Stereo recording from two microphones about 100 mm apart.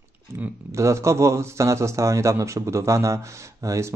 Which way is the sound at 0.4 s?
30° right (ahead or behind).